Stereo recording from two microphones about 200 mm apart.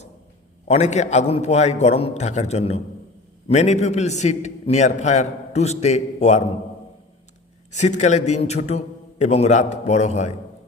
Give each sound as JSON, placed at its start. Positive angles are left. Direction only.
{"t": 0.7, "sound": "a man's voice", "side_deg": 35}
{"t": 7.7, "sound": "a man's voice", "side_deg": 35}